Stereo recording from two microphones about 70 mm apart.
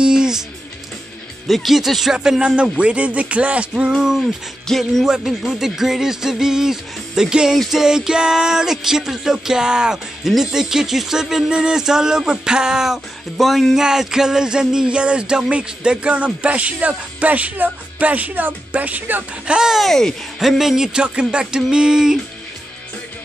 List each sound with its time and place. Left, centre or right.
0.0 s music: centre
1.5 s speech: centre
2.1 s music: centre
4.6 s speech: centre
5.0 s music: centre
7.5 s speech: centre
7.8 s music: centre; by 19.2 s right
19.4 s music: centre
19.8 s speech: centre
20.3 s music: centre